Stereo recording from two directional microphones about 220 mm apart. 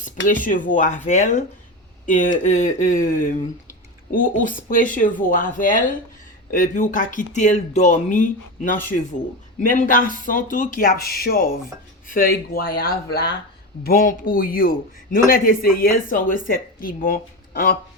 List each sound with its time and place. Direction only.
0.3 s a man's voice: 35° left (ahead or behind)